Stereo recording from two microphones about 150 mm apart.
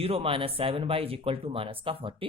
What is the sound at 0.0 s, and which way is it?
Speech, 40° right (ahead or behind).